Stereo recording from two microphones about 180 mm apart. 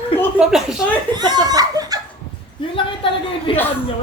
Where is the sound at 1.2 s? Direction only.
20° right (ahead or behind).